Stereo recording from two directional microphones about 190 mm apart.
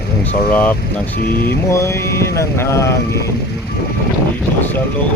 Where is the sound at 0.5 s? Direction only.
10° left (ahead or behind).